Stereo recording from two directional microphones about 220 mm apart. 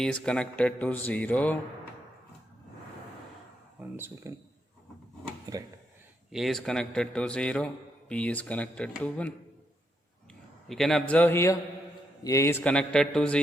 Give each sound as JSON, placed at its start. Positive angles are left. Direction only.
{"t": 0.0, "sound": "speech", "side_deg": 5}
{"t": 3.8, "sound": "speech", "side_deg": -10}
{"t": 5.5, "sound": "speech", "side_deg": -15}
{"t": 6.3, "sound": "a man's voice", "side_deg": 0}
{"t": 10.7, "sound": "a man's voice", "side_deg": 0}